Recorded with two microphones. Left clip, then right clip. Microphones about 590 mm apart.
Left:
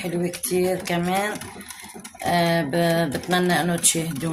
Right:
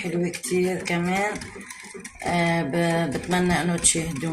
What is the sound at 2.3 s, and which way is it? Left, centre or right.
Speech, left.